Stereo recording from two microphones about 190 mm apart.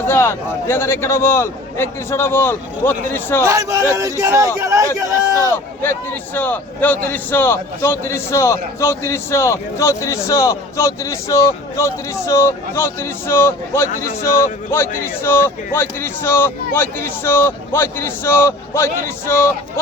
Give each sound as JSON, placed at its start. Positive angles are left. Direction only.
{"t": 0.1, "sound": "a man's voice", "side_deg": 15}
{"t": 3.4, "sound": "a man's voice", "side_deg": -15}
{"t": 5.8, "sound": "a man's voice", "side_deg": 10}